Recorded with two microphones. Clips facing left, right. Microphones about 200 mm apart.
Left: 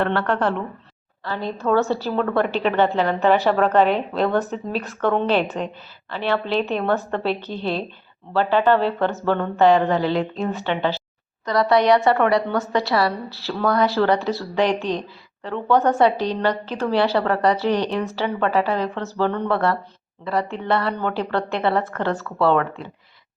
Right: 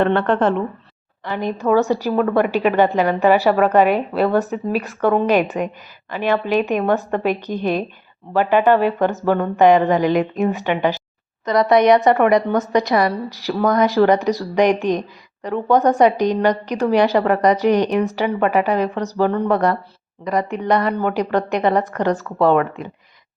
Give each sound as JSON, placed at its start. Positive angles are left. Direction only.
{"t": 0.0, "sound": "a woman's voice", "side_deg": -20}